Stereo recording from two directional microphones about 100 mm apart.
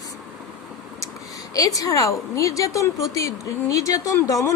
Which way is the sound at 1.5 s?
35° left (ahead or behind).